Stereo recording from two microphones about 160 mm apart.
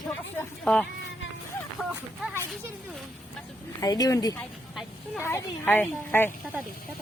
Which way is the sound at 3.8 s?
20° left (ahead or behind).